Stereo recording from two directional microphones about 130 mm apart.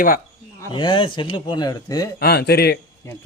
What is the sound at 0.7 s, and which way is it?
Speech, 40° left (ahead or behind).